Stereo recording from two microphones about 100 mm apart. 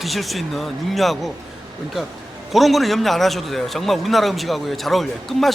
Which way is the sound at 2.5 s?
Centre (ahead or behind).